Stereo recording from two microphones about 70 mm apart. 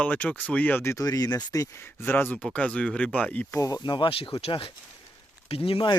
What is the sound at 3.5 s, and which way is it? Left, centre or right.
Speech, left.